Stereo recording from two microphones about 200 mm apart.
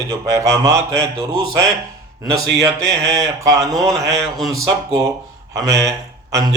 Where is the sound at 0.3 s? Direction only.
15° right (ahead or behind).